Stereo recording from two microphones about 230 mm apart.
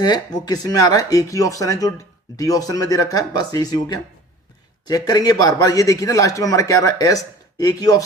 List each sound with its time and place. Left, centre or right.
0.0 s a man's voice: centre